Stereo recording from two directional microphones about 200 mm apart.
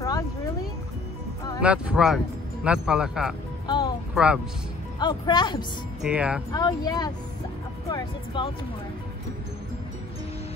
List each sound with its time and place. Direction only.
1.6 s speech: 5° right (ahead or behind)
3.6 s music: 25° left (ahead or behind)
4.1 s speech: 5° right (ahead or behind)
4.9 s speech: 20° left (ahead or behind)
6.0 s speech: 5° right (ahead or behind)
6.5 s speech: 20° left (ahead or behind)
8.3 s speech: 25° left (ahead or behind)